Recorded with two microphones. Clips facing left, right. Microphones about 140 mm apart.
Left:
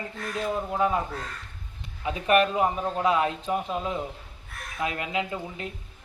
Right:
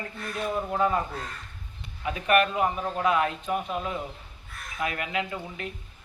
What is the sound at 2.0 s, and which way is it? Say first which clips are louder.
A man's voice: left 1 dB; 25° left (ahead or behind).